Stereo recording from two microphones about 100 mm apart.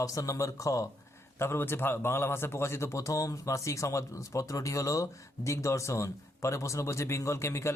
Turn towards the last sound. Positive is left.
turn(degrees=30)  # may be behind; listen again after turning